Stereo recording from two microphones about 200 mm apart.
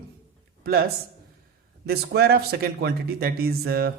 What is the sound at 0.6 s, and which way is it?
Speech, 50° right (ahead or behind).